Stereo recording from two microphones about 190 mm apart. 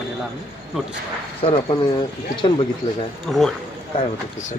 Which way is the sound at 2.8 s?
35° left (ahead or behind).